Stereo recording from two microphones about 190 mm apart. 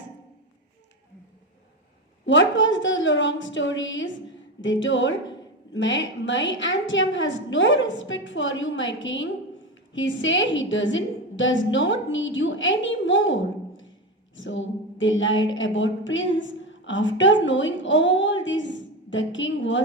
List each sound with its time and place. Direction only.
2.2 s a woman's voice: 75° left (ahead or behind)